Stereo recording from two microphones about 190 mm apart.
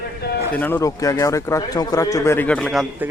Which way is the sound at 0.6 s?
10° left (ahead or behind).